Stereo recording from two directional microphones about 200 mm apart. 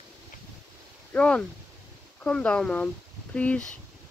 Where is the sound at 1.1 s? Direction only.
5° left (ahead or behind).